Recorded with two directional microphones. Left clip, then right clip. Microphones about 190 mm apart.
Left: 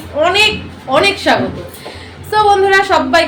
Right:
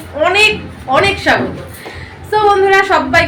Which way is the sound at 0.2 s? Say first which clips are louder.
Left 1 dB; 15° left (ahead or behind).